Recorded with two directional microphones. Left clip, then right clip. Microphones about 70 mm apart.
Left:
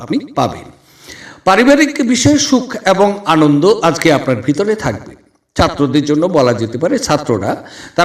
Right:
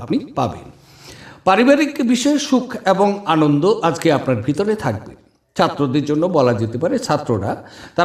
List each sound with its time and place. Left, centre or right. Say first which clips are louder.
0.0 s a man's voice: left 5 dB; left
3.2 s a man's voice: left 5 dB; left